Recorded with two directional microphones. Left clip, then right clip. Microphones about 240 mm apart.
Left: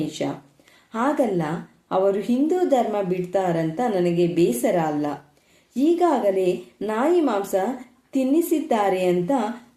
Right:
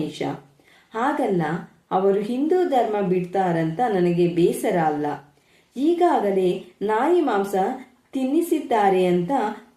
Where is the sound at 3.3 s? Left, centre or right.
Left.